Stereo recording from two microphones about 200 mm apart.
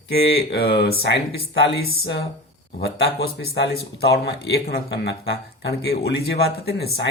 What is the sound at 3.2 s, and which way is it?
Speech, 60° left (ahead or behind).